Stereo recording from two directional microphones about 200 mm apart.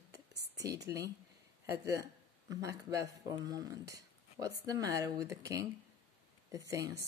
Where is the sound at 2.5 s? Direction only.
15° right (ahead or behind).